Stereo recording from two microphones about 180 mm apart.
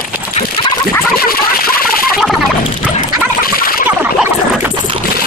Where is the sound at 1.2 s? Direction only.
55° left (ahead or behind).